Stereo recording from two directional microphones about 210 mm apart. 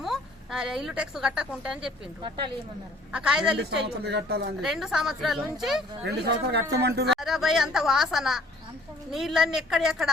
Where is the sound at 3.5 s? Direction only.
50° right (ahead or behind).